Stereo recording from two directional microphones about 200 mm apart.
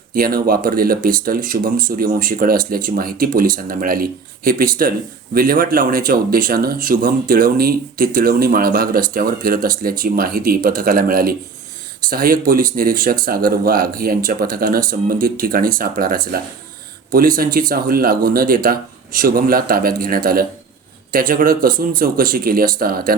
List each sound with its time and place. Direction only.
0.1 s speech: 45° right (ahead or behind)